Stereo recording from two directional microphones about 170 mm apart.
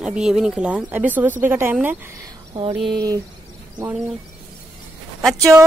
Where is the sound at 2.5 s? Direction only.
30° right (ahead or behind).